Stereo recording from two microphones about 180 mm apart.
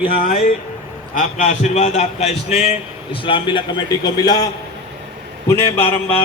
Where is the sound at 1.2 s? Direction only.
45° left (ahead or behind); by 6.2 s 10° left (ahead or behind).